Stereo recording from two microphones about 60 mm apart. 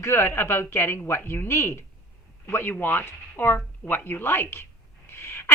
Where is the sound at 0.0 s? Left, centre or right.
Left.